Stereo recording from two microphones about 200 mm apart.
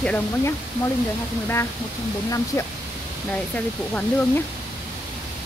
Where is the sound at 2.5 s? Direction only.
10° left (ahead or behind).